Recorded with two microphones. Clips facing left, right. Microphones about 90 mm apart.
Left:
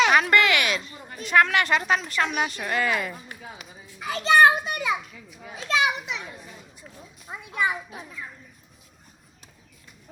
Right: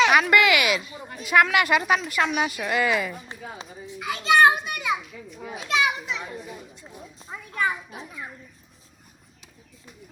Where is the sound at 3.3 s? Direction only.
25° right (ahead or behind).